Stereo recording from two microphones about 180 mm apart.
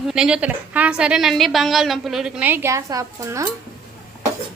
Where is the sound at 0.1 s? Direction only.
5° right (ahead or behind).